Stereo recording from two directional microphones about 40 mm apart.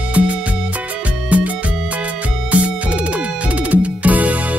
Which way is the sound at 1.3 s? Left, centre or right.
Right.